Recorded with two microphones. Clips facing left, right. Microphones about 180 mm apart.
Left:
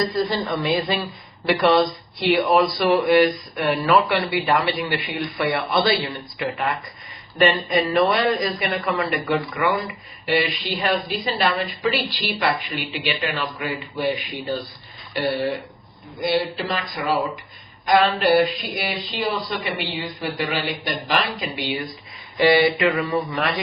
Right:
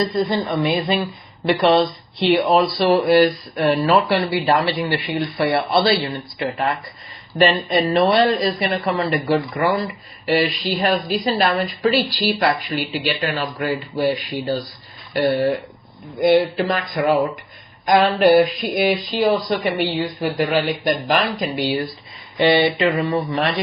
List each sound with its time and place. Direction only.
0.0 s speech: 20° right (ahead or behind); by 21.8 s 40° right (ahead or behind)
22.4 s speech: 25° right (ahead or behind)